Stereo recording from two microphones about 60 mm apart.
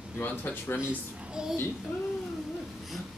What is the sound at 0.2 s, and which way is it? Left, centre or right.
Speech, left.